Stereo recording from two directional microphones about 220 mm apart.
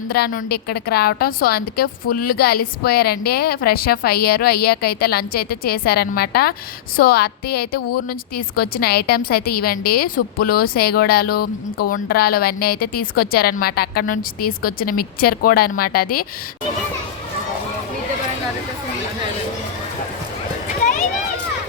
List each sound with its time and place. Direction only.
0.1 s a woman's voice: 45° left (ahead or behind)